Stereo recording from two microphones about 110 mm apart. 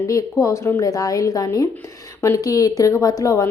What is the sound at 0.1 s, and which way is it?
A woman's voice, 30° left (ahead or behind).